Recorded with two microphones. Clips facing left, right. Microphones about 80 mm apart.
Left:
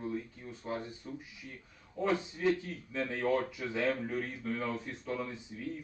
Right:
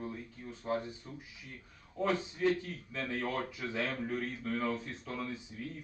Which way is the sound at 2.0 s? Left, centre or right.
Centre.